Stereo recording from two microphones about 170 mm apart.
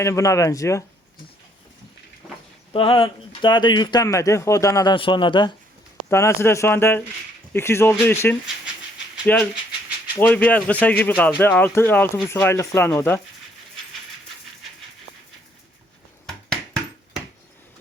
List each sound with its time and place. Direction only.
0.0 s speech: 15° left (ahead or behind)
2.2 s a sound: 5° right (ahead or behind)
2.7 s speech: 30° left (ahead or behind)
6.1 s speech: 15° left (ahead or behind)